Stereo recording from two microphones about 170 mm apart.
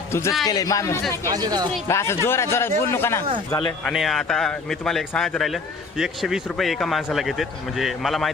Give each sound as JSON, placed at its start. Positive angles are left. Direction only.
{"t": 0.1, "sound": "a man's voice", "side_deg": 15}
{"t": 1.2, "sound": "speech", "side_deg": -20}
{"t": 1.9, "sound": "speech", "side_deg": 15}
{"t": 3.8, "sound": "speech", "side_deg": 0}